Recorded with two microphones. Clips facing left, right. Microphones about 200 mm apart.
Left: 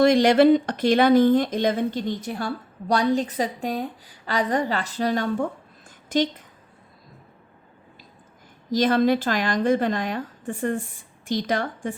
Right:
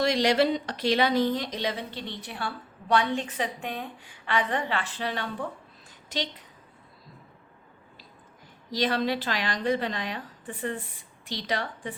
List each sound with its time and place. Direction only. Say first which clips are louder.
0.0 s speech: left 7 dB; 50° left (ahead or behind)
8.7 s speech: left 7 dB; 45° left (ahead or behind)